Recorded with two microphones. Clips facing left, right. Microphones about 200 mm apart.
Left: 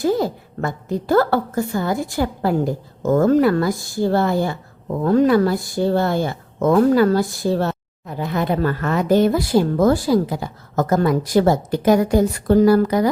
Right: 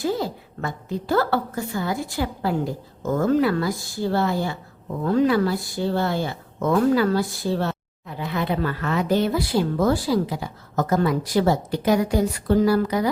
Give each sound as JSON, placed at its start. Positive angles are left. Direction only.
{"t": 0.0, "sound": "a woman's voice", "side_deg": 45}